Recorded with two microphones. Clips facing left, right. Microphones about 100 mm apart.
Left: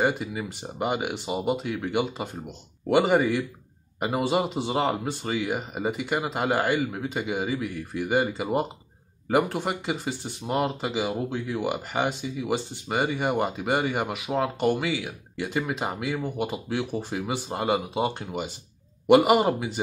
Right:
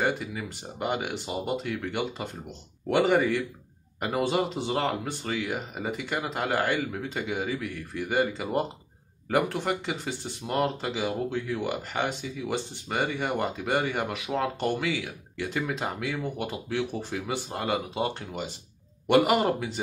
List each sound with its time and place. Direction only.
0.0 s speech: 15° left (ahead or behind)